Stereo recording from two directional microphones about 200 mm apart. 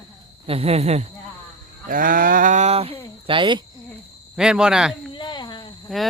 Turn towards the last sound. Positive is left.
turn(degrees=0)  # may be behind; listen again after turning